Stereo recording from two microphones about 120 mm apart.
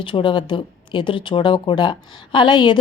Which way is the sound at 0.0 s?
45° left (ahead or behind).